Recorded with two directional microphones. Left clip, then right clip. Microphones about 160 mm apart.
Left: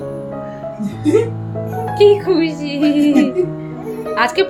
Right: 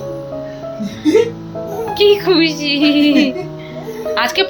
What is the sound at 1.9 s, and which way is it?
A woman's voice, centre (ahead or behind).